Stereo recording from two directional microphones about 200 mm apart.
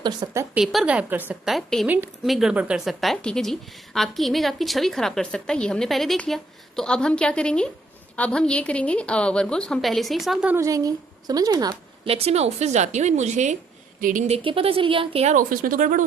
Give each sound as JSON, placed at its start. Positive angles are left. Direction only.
{"t": 0.0, "sound": "a woman's voice", "side_deg": -20}
{"t": 0.5, "sound": "a woman's voice", "side_deg": 0}
{"t": 10.6, "sound": "a woman's voice", "side_deg": -15}
{"t": 12.1, "sound": "speech", "side_deg": -30}